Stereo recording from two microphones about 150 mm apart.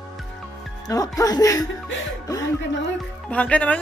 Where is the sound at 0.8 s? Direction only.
25° left (ahead or behind).